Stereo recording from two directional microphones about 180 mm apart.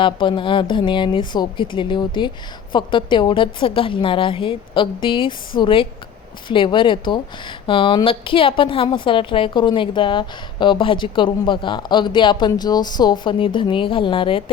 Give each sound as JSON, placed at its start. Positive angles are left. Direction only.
{"t": 0.0, "sound": "a woman's voice", "side_deg": 25}